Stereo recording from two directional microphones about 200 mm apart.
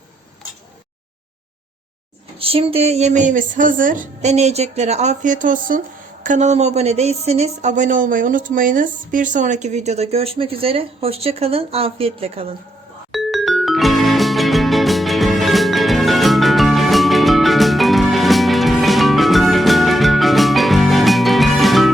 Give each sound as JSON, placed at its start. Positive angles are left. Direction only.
{"t": 2.4, "sound": "speech", "side_deg": -25}
{"t": 13.1, "sound": "music", "side_deg": 0}